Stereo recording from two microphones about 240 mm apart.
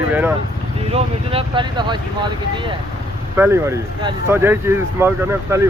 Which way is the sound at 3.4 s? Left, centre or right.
Centre.